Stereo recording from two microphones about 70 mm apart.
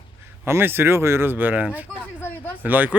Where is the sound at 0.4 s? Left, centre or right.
Right.